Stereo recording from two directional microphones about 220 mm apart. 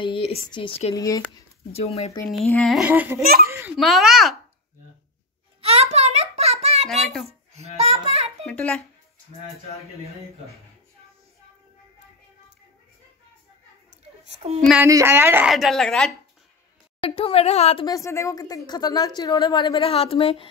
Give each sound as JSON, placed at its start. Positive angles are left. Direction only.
{"t": 0.0, "sound": "speech", "side_deg": 25}
{"t": 0.9, "sound": "speech", "side_deg": 15}
{"t": 1.8, "sound": "a woman's voice", "side_deg": 30}
{"t": 2.3, "sound": "a woman's voice", "side_deg": 0}
{"t": 3.7, "sound": "a woman's voice", "side_deg": 0}
{"t": 5.6, "sound": "a sound", "side_deg": -25}
{"t": 8.5, "sound": "a woman's voice", "side_deg": 5}
{"t": 14.2, "sound": "a child's voice", "side_deg": -30}
{"t": 14.7, "sound": "a woman's voice", "side_deg": -10}
{"t": 17.0, "sound": "a woman's voice", "side_deg": 25}
{"t": 17.8, "sound": "a woman's voice", "side_deg": 15}